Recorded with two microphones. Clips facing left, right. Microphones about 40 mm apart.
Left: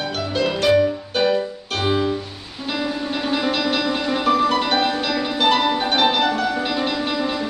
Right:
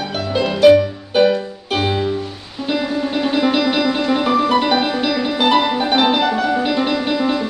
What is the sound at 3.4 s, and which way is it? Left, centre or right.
Music, centre.